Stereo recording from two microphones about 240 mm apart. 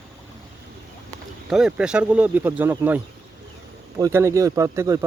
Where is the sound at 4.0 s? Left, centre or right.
Centre.